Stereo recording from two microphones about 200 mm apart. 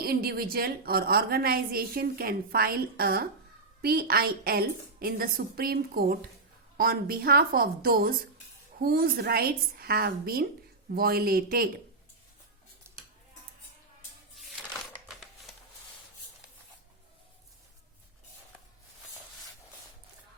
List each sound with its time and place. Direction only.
0.0 s a woman's voice: 50° right (ahead or behind)